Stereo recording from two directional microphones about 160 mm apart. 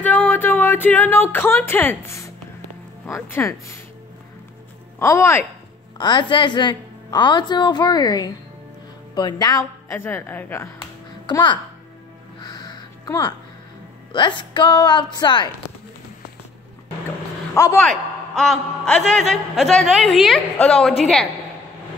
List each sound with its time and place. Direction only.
0.0 s music: 10° left (ahead or behind)
3.1 s speech: 15° left (ahead or behind)
4.9 s speech: 15° left (ahead or behind)
5.9 s a woman's voice: 30° left (ahead or behind)
12.4 s crow: 25° left (ahead or behind)
14.1 s a woman's voice: 30° left (ahead or behind)
17.6 s speech: 15° left (ahead or behind)
17.8 s a man's voice: 5° left (ahead or behind)